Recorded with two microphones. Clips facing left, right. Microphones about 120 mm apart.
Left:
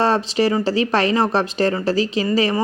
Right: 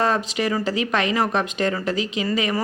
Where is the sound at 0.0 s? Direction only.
30° left (ahead or behind).